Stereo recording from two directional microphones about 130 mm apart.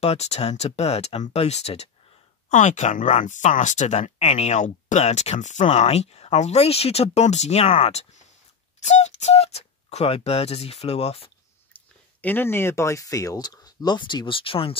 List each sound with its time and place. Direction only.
0.0 s speech: 55° left (ahead or behind)
2.5 s speech: 65° left (ahead or behind); by 11.3 s 50° left (ahead or behind)
11.7 s speech: 15° left (ahead or behind); by 14.8 s 45° left (ahead or behind)